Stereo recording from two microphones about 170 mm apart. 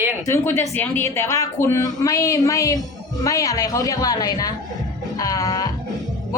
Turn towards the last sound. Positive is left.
turn(degrees=20)  # may be behind; listen again after turning